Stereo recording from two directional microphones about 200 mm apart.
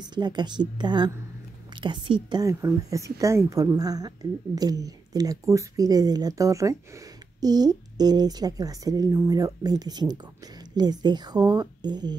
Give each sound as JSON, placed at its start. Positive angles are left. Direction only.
{"t": 0.1, "sound": "speech", "side_deg": -20}